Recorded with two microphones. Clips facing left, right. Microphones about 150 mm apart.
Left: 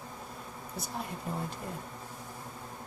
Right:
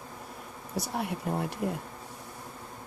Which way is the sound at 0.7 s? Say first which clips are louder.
Right 7 dB; 70° right (ahead or behind).